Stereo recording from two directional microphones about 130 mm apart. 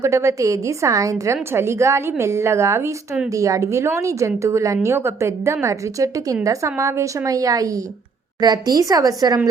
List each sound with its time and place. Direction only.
0.0 s a woman's voice: 20° right (ahead or behind)